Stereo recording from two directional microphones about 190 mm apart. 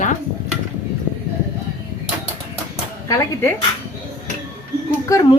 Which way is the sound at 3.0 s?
15° left (ahead or behind).